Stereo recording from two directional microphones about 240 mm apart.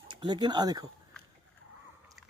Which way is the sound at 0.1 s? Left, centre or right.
Centre.